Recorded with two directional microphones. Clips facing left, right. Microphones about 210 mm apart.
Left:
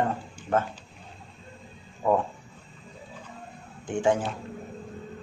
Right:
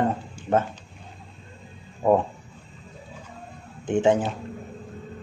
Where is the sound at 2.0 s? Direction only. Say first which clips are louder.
Right 4 dB; 25° right (ahead or behind).